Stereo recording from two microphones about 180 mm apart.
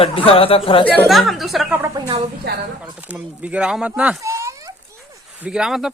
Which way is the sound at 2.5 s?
65° right (ahead or behind).